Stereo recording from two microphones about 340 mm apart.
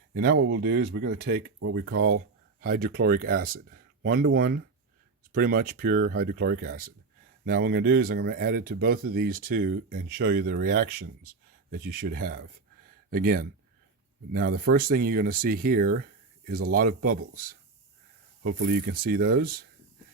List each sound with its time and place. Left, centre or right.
0.1 s speech: right
11.9 s speech: right
18.4 s speech: right